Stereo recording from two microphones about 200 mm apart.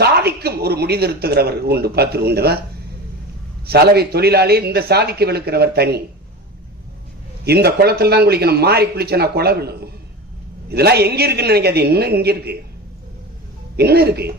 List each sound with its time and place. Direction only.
0.0 s speech: 50° right (ahead or behind)
3.7 s a man's voice: 55° right (ahead or behind)
7.4 s a man's voice: 50° right (ahead or behind)
13.7 s a man's voice: 50° right (ahead or behind)